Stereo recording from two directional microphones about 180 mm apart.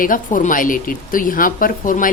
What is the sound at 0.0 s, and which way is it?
Speech, 50° left (ahead or behind).